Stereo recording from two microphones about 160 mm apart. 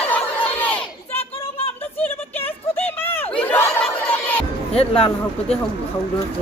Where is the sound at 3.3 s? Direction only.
10° left (ahead or behind).